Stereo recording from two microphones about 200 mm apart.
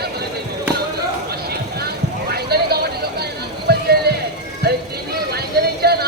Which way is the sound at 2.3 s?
50° right (ahead or behind).